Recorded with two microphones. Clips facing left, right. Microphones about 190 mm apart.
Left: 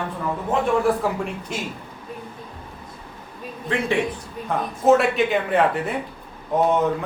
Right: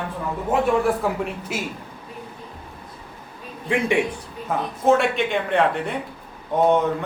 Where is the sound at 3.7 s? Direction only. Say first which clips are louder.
Right 2 dB; 15° right (ahead or behind).